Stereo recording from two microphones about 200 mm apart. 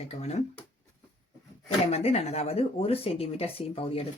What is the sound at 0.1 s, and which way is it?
Speech, 35° left (ahead or behind).